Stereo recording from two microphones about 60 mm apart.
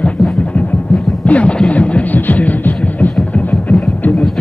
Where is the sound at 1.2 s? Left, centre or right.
Left.